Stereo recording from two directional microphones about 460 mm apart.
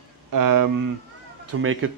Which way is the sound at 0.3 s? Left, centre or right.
Right.